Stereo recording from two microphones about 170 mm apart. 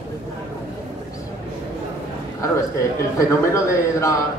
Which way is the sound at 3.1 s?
20° left (ahead or behind).